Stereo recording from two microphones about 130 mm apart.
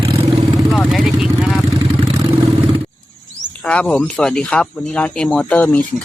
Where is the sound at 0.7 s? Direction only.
Centre (ahead or behind).